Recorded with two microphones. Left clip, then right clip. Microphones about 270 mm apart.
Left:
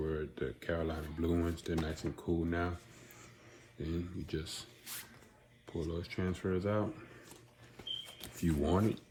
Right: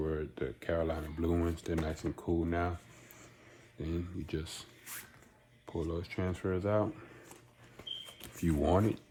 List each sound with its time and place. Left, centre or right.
0.0 s dishes: right
2.4 s speech: right
3.8 s speech: right
5.6 s speech: right
8.2 s speech: right